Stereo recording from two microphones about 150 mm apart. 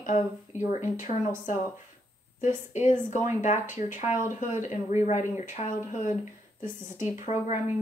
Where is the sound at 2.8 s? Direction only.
55° left (ahead or behind).